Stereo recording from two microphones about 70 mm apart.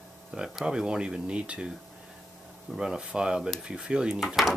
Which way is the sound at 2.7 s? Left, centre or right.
Centre.